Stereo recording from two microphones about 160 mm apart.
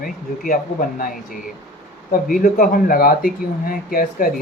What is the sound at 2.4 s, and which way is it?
Speech, 65° left (ahead or behind).